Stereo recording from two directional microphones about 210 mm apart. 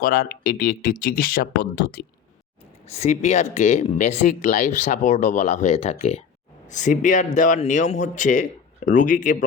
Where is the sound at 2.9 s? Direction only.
30° left (ahead or behind).